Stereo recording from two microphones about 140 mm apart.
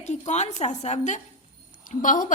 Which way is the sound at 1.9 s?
70° left (ahead or behind).